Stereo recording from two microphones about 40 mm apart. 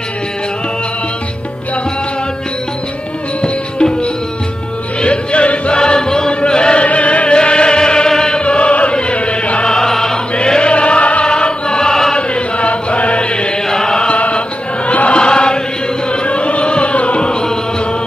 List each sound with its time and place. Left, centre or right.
3.4 s music: left
5.8 s chant: centre
9.7 s music: centre
10.3 s choir: left
12.2 s chant: left
13.7 s chant: centre
14.0 s chant: left
15.1 s chant: left
16.1 s music: left